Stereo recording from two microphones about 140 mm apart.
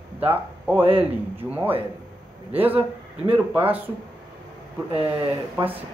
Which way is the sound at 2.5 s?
10° right (ahead or behind).